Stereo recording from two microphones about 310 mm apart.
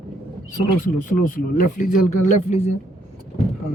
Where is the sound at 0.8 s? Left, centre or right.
Left.